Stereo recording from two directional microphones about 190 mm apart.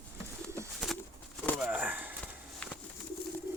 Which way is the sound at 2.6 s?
5° left (ahead or behind).